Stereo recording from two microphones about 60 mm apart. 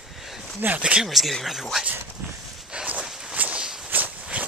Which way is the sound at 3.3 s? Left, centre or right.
Right.